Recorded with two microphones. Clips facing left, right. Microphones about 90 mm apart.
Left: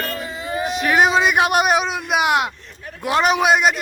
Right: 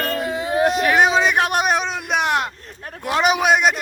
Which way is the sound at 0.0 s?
60° right (ahead or behind).